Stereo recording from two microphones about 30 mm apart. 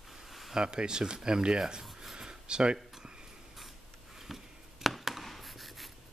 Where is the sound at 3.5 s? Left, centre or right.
Centre.